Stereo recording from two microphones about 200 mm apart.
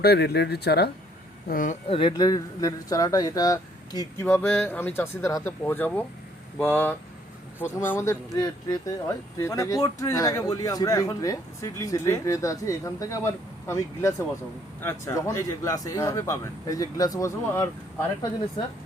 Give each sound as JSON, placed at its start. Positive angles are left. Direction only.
{"t": 0.0, "sound": "speech", "side_deg": 55}
{"t": 1.5, "sound": "speech", "side_deg": 40}